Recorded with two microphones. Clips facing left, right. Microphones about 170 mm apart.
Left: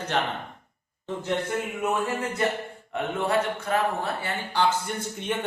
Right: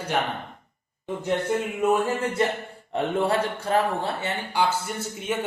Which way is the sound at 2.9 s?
30° right (ahead or behind).